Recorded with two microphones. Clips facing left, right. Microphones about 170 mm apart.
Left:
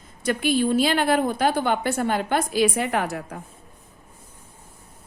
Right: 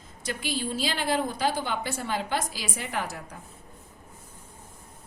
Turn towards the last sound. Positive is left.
turn(degrees=60)  # may be behind; listen again after turning